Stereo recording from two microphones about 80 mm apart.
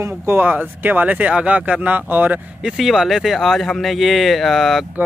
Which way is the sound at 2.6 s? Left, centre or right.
Centre.